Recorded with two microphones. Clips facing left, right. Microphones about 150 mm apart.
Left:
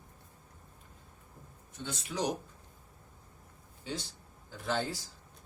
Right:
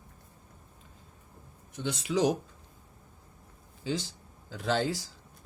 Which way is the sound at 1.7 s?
85° right.